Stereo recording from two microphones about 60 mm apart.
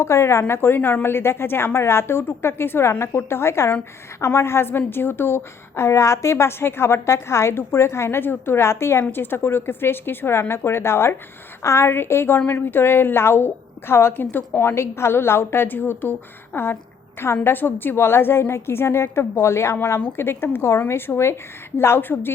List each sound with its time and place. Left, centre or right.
0.0 s a woman's voice: left
14.6 s a woman's voice: left